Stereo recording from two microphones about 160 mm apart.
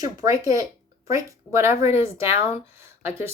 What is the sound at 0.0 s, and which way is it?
Speech, 25° right (ahead or behind).